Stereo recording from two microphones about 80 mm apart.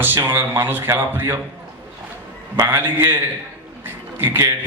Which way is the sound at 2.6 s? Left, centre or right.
Right.